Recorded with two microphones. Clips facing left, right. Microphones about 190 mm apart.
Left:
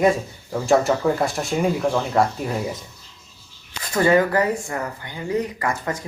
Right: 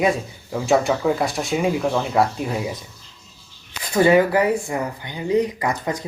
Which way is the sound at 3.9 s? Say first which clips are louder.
Right 2 dB; 15° right (ahead or behind).